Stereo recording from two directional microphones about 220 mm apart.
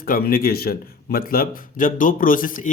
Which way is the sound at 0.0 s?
40° left (ahead or behind).